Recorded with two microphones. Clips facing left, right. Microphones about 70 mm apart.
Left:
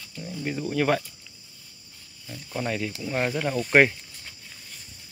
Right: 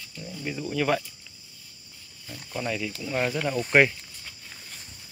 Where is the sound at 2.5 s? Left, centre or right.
Left.